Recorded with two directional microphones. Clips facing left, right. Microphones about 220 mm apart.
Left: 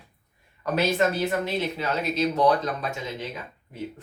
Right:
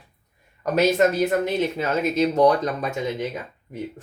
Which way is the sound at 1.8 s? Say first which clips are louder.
Right 4 dB; 45° right (ahead or behind).